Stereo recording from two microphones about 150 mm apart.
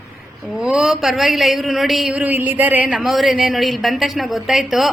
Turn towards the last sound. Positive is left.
turn(degrees=0)  # may be behind; listen again after turning